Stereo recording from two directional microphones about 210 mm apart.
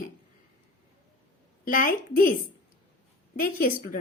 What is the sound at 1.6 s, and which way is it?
Speech, 40° left (ahead or behind).